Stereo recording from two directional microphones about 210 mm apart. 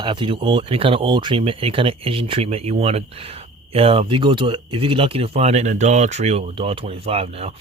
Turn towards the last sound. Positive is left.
turn(degrees=-30)  # may be behind; listen again after turning